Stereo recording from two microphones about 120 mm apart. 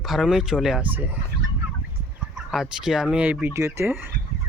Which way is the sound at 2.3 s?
5° right (ahead or behind).